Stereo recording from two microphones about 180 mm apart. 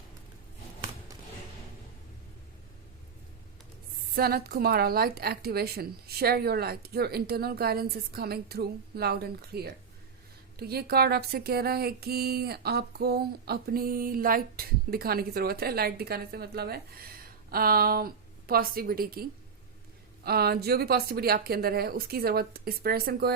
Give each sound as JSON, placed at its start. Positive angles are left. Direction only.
{"t": 4.1, "sound": "speech", "side_deg": -55}
{"t": 20.2, "sound": "speech", "side_deg": -60}